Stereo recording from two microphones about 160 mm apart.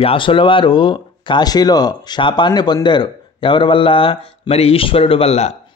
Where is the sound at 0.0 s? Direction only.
35° left (ahead or behind).